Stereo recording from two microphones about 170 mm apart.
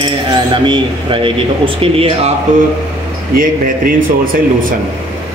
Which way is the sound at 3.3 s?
55° right (ahead or behind).